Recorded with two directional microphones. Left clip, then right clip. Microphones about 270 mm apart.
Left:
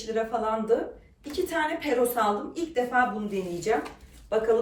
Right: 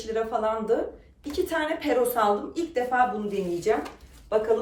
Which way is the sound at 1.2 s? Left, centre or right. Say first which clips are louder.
Right 1 dB; centre.